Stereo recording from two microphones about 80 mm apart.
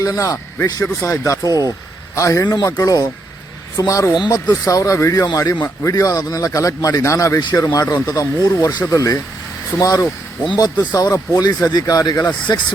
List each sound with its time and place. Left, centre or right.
0.0 s speech: left
1.5 s speech: right
2.1 s speech: left
5.2 s a man's voice: left